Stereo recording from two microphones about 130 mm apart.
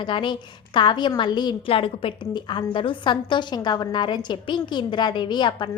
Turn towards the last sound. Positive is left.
turn(degrees=35)  # may be behind; listen again after turning